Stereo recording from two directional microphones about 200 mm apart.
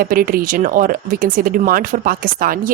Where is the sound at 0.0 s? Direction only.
45° right (ahead or behind).